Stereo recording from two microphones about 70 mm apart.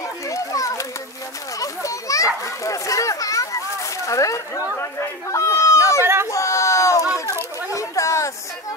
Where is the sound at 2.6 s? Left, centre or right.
Left.